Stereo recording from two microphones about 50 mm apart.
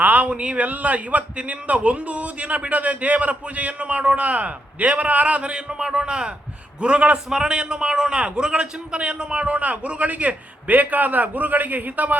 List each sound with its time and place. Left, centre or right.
0.0 s a man's voice: right